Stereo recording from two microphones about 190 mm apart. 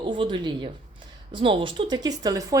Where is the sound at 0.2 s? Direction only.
25° right (ahead or behind).